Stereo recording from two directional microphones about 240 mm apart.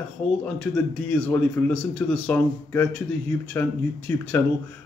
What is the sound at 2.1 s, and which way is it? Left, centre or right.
Speech, centre.